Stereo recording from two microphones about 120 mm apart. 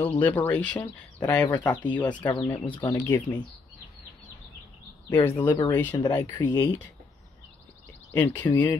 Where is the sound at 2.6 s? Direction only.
45° left (ahead or behind).